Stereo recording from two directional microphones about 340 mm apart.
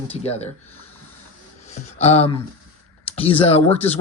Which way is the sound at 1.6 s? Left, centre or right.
Centre.